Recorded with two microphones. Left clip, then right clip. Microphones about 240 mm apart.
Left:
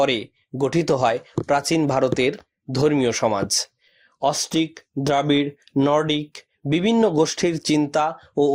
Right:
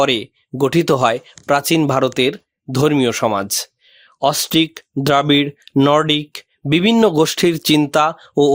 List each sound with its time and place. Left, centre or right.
0.0 s speech: right